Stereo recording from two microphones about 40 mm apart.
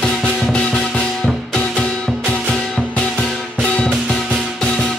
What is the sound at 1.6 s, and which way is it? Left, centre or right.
Music, left.